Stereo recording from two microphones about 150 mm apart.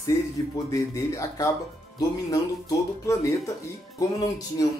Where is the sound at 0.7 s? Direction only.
20° left (ahead or behind).